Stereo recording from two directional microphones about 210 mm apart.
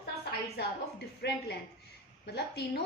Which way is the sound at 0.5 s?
50° left (ahead or behind).